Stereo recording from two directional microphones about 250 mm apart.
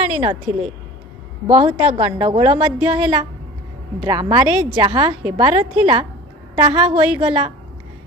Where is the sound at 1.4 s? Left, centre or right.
Right.